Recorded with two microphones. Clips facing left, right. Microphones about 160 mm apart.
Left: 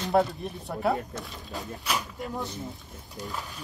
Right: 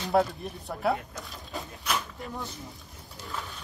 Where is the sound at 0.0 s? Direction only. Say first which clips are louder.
Left 1 dB; centre (ahead or behind).